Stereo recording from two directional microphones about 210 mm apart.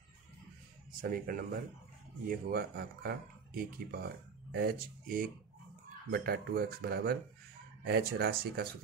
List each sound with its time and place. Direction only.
1.1 s speech: 45° right (ahead or behind)